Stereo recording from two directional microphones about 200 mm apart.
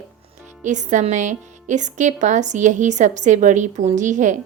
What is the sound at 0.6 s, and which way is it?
Speech, 35° right (ahead or behind).